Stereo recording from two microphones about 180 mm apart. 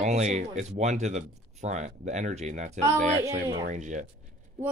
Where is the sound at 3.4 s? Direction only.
20° right (ahead or behind).